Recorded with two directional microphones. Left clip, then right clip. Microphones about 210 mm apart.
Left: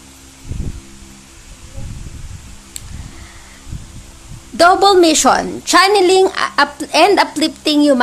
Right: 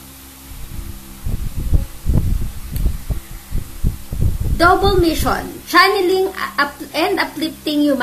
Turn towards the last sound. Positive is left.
turn(degrees=35)  # may be behind; listen again after turning